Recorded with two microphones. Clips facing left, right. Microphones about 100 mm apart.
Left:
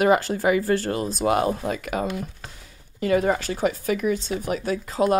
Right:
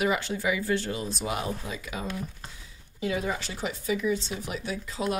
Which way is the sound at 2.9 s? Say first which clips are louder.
Left 9 dB; 55° left (ahead or behind).